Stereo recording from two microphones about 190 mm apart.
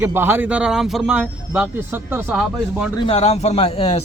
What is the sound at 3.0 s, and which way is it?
A man's voice, 30° left (ahead or behind).